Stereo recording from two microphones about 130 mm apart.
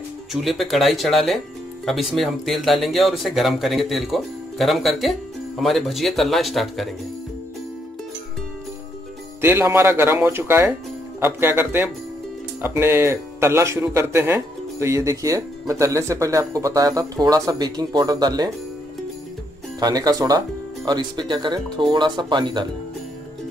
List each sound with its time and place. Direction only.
0.3 s speech: centre (ahead or behind)
9.4 s speech: 20° right (ahead or behind)
19.8 s speech: 30° right (ahead or behind)